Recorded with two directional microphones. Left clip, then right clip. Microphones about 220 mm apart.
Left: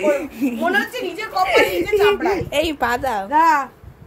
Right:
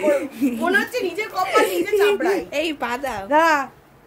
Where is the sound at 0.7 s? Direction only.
20° right (ahead or behind).